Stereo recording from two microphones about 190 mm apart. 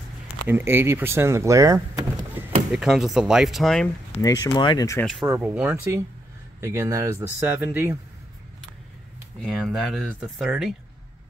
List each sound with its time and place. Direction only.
0.5 s speech: 10° right (ahead or behind)
2.7 s speech: 5° right (ahead or behind)
4.2 s speech: 20° left (ahead or behind)
5.2 s speech: 10° right (ahead or behind)
9.4 s speech: 5° right (ahead or behind)